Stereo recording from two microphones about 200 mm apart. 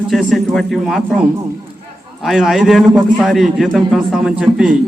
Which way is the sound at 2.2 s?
Centre (ahead or behind).